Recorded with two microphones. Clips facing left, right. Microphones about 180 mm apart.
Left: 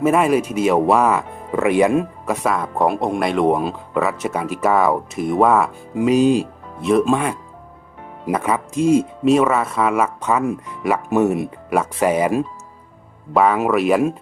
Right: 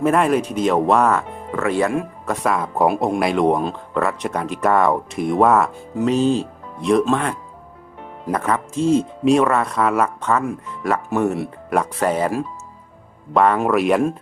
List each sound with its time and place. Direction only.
0.0 s speech: 5° left (ahead or behind)
2.2 s speech: 5° left (ahead or behind)
5.9 s speech: 10° left (ahead or behind)
13.3 s speech: 5° left (ahead or behind)